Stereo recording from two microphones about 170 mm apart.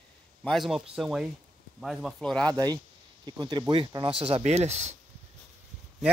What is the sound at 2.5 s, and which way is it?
Speech, 25° right (ahead or behind).